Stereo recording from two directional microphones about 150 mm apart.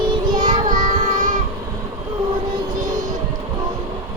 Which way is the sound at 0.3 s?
30° right (ahead or behind).